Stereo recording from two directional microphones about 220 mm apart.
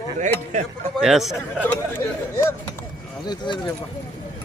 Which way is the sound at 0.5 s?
30° right (ahead or behind).